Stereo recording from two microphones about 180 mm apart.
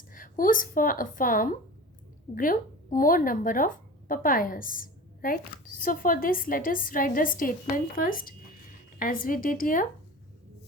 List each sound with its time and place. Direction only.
0.1 s a woman's voice: 50° left (ahead or behind)